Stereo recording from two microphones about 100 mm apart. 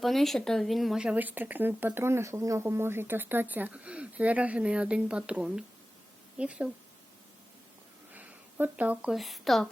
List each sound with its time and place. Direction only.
0.0 s speech: centre (ahead or behind)
8.1 s a sound: 20° right (ahead or behind)
9.1 s speech: centre (ahead or behind)